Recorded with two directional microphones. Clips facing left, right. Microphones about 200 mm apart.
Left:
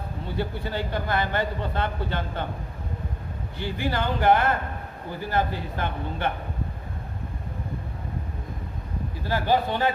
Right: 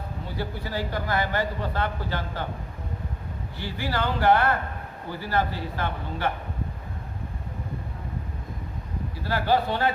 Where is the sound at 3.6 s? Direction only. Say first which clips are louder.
Left 1 dB; 20° left (ahead or behind).